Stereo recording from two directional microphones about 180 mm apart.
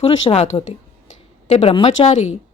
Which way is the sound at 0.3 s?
30° left (ahead or behind).